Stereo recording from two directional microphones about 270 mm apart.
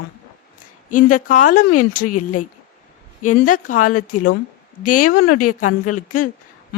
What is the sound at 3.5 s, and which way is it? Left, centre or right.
Speech, left.